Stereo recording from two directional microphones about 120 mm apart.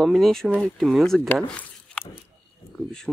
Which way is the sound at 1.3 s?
10° left (ahead or behind).